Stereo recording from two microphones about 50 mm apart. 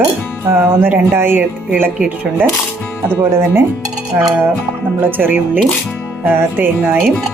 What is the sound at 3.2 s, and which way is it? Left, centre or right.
Speech, right.